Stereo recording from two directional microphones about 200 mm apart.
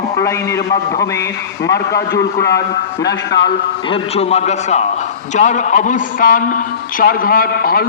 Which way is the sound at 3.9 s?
30° left (ahead or behind).